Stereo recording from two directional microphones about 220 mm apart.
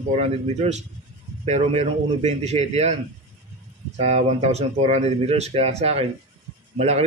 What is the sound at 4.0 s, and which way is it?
A man's voice, 30° right (ahead or behind).